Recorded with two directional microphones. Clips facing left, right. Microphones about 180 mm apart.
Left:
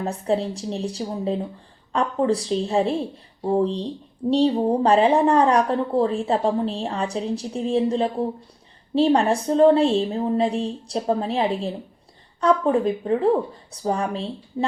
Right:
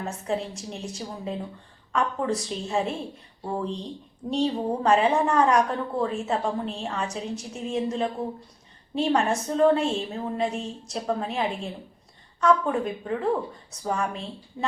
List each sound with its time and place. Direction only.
0.0 s speech: 35° left (ahead or behind)